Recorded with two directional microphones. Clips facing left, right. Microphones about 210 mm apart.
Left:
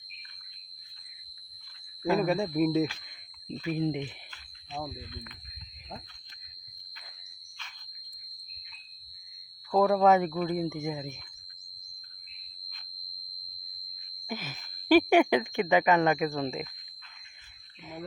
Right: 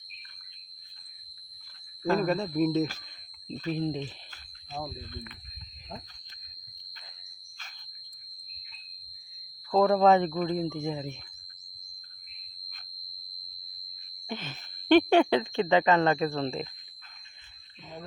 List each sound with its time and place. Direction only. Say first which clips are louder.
2.0 s speech: even; 10° left (ahead or behind)
9.7 s speech: right 1 dB; 5° left (ahead or behind)
14.3 s a sound: even; 10° left (ahead or behind)
14.8 s speech: right 1 dB; 10° left (ahead or behind)